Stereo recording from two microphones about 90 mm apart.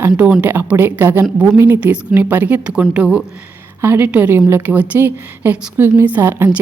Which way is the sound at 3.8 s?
25° right (ahead or behind).